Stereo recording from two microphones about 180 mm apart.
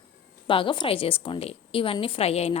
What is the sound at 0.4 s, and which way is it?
A woman's voice, 30° left (ahead or behind).